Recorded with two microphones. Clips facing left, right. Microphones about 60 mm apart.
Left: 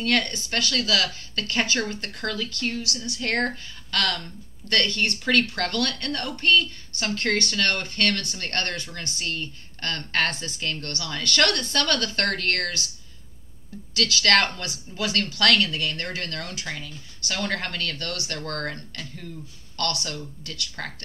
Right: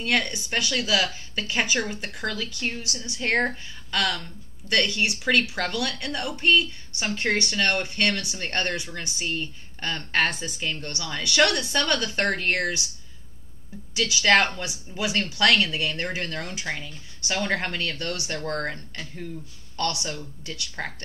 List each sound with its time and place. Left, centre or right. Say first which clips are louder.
0.0 s speech: left 1 dB; centre
2.6 s speech: left 2 dB; right
13.9 s speech: right 1 dB; centre